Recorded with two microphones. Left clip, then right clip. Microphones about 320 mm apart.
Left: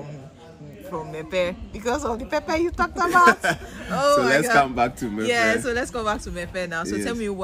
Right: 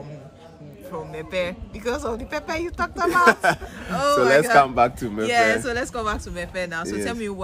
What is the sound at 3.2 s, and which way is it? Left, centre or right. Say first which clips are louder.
Speech: right 1 dB; centre.